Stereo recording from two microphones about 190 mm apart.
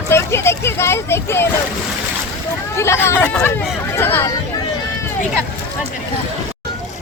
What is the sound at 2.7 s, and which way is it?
Speech, 15° left (ahead or behind).